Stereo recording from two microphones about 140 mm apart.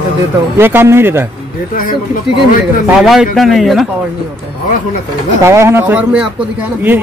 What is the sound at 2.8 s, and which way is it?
A man's voice, 5° right (ahead or behind).